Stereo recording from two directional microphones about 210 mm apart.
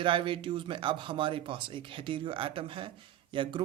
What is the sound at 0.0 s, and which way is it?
Speech, 25° right (ahead or behind).